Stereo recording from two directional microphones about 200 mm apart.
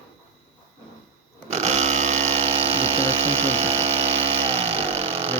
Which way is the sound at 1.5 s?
35° right (ahead or behind).